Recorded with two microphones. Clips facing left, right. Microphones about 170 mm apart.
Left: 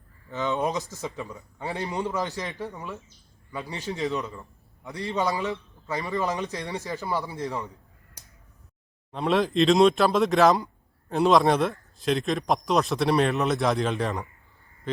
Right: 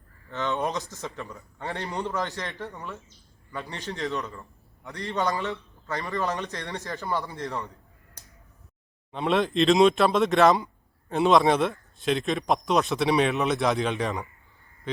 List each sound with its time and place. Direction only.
0.3 s a man's voice: 15° left (ahead or behind)
1.3 s speech: centre (ahead or behind)
1.6 s a man's voice: 15° left (ahead or behind)
4.3 s a sound: 15° left (ahead or behind)
5.0 s a man's voice: 15° left (ahead or behind)
9.1 s speech: centre (ahead or behind)